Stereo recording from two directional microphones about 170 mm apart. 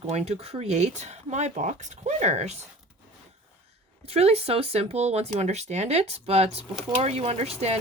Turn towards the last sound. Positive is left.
turn(degrees=-40)  # may be behind; listen again after turning